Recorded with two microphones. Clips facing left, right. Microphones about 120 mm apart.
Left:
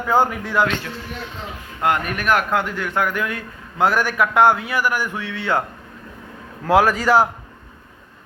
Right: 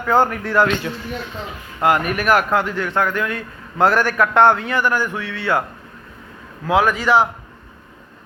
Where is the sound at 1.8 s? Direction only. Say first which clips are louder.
Right 3 dB; 5° right (ahead or behind); by 5.6 s 20° left (ahead or behind).